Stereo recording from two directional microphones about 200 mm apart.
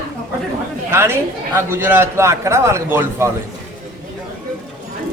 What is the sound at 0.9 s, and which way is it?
A man's voice, 10° right (ahead or behind).